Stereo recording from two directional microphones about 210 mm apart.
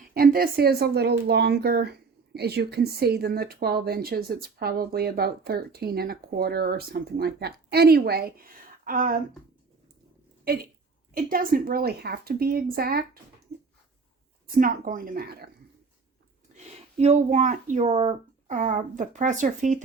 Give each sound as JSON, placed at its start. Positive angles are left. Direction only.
{"t": 0.1, "sound": "speech", "side_deg": -45}
{"t": 11.1, "sound": "speech", "side_deg": -45}
{"t": 14.6, "sound": "speech", "side_deg": -40}
{"t": 16.5, "sound": "a sound", "side_deg": -35}
{"t": 17.0, "sound": "a child's voice", "side_deg": -30}